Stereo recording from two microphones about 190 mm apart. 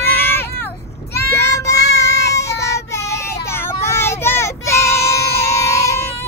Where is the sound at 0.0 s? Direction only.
10° left (ahead or behind).